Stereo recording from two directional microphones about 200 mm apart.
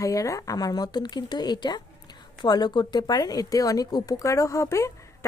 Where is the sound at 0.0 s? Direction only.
15° left (ahead or behind).